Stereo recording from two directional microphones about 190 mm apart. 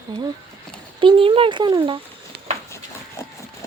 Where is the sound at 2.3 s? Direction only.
55° right (ahead or behind).